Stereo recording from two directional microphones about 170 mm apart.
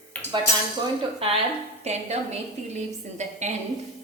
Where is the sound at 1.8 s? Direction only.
40° right (ahead or behind).